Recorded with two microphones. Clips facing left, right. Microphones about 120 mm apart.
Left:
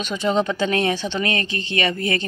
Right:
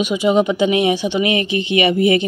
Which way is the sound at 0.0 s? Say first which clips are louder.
Right 6 dB; 10° right (ahead or behind).